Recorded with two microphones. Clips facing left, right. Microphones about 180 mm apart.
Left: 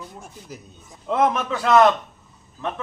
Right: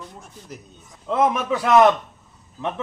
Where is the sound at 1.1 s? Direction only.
5° right (ahead or behind).